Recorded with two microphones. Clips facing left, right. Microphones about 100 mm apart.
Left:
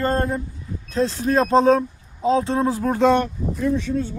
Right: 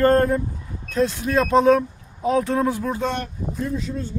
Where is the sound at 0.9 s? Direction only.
30° left (ahead or behind).